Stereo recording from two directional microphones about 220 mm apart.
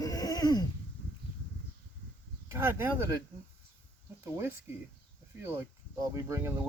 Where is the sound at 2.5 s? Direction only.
15° right (ahead or behind).